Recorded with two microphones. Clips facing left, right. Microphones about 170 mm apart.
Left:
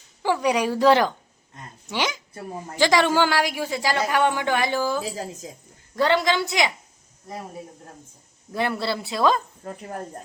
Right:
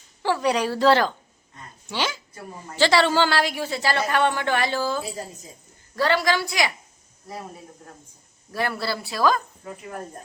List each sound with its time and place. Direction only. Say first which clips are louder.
0.2 s a woman's voice: left 1 dB; 15° left (ahead or behind)
5.0 s speech: left 3 dB; 90° left
6.0 s speech: left 1 dB; 20° left (ahead or behind)
8.5 s speech: left 2 dB; 20° left (ahead or behind)